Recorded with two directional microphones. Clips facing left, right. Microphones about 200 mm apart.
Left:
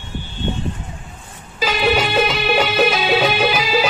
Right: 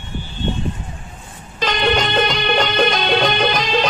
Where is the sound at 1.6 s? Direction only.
5° left (ahead or behind).